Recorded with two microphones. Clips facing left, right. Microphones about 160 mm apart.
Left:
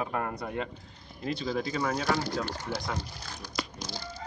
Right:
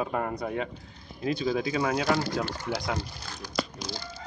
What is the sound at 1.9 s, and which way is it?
Speech, 85° right.